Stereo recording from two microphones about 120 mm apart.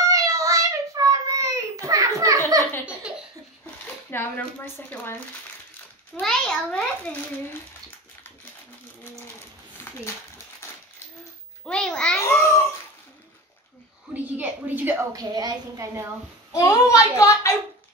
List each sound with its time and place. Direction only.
0.0 s child singing: 30° right (ahead or behind)
3.8 s speech: 15° left (ahead or behind)
6.2 s a child's voice: 5° left (ahead or behind)
6.7 s a child's voice: 15° left (ahead or behind)
11.6 s a sound: 5° left (ahead or behind)
12.2 s babbling: 20° left (ahead or behind)
14.1 s a sound: 15° right (ahead or behind)
15.1 s a woman's voice: 30° right (ahead or behind)
16.5 s a child's voice: 30° left (ahead or behind)